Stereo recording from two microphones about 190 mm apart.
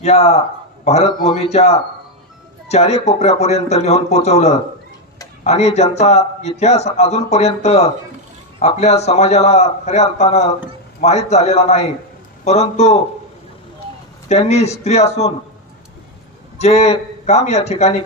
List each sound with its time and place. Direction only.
0.0 s a man's voice: 35° left (ahead or behind)
14.3 s a man's voice: 35° left (ahead or behind)
16.5 s a man's voice: 35° left (ahead or behind)